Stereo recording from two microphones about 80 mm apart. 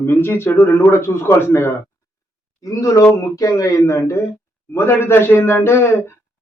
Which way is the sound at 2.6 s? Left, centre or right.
Left.